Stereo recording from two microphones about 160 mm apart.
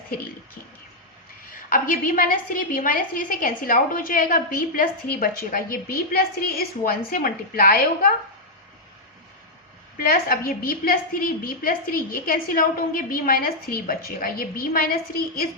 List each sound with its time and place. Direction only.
1.5 s a woman's voice: 60° left (ahead or behind)
10.0 s a woman's voice: 65° left (ahead or behind)